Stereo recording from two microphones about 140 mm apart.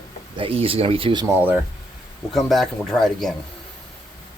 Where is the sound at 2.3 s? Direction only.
Centre (ahead or behind).